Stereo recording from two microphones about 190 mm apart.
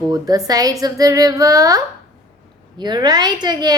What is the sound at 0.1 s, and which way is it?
A woman's voice, 20° right (ahead or behind).